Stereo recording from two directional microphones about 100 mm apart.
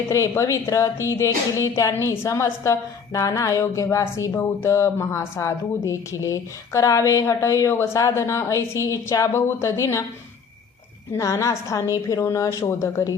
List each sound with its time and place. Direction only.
0.1 s speech: 30° left (ahead or behind)
11.1 s a woman's voice: 30° left (ahead or behind)